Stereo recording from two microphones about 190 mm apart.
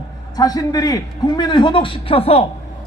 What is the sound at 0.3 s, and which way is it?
A man's voice, 20° left (ahead or behind).